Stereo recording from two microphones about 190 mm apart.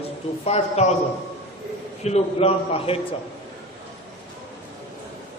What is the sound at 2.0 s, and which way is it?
Speech, 35° left (ahead or behind).